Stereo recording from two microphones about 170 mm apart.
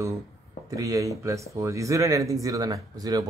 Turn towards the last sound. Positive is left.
turn(degrees=-20)  # may be behind; listen again after turning